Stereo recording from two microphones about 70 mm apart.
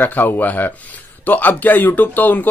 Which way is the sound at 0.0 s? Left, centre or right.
Left.